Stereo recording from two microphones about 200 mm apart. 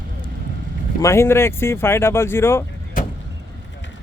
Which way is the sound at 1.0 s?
15° left (ahead or behind).